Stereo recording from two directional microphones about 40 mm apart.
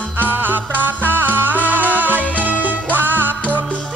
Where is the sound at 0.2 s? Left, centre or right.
Right.